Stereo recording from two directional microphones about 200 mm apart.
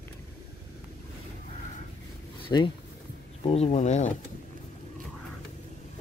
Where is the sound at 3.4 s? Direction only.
30° left (ahead or behind).